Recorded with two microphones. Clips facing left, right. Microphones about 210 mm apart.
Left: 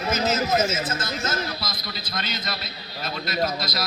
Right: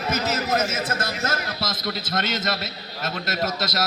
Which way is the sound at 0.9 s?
65° right (ahead or behind).